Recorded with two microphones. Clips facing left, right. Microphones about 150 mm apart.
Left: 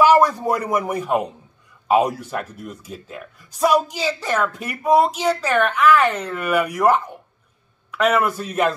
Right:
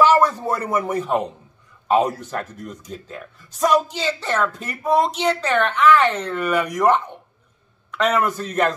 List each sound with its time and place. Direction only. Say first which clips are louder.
0.0 s speech: left 1 dB; 10° left (ahead or behind)